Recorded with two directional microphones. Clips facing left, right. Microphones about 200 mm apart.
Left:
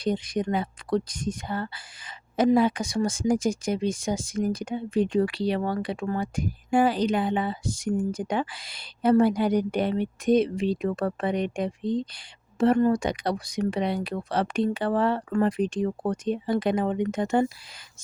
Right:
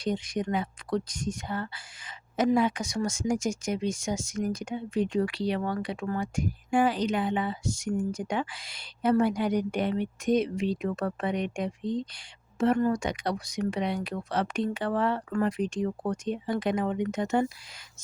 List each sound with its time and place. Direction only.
0.0 s speech: 35° left (ahead or behind)